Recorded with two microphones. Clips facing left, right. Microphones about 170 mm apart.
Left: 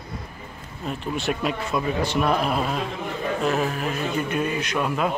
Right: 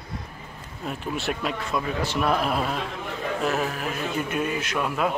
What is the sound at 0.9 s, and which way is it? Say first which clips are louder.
A man's voice: left 2 dB; centre (ahead or behind).